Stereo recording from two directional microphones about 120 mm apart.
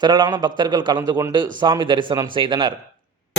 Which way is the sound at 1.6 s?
40° right (ahead or behind).